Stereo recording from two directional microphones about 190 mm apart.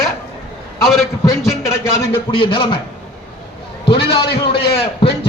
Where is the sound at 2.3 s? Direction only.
25° left (ahead or behind).